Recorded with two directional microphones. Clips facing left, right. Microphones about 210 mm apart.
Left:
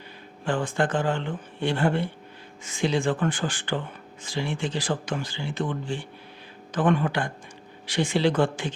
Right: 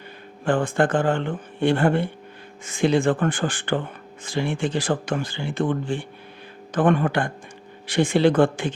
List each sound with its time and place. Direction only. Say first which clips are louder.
0.4 s speech: right 5 dB; 50° right (ahead or behind)